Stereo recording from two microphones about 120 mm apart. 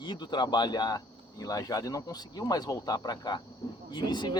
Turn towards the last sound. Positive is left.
turn(degrees=35)  # may be behind; listen again after turning